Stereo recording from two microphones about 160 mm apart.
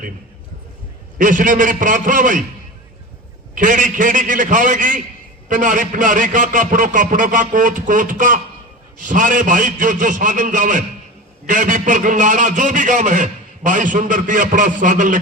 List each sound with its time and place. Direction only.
1.2 s a man's voice: 55° right (ahead or behind)
3.5 s a man's voice: 55° right (ahead or behind)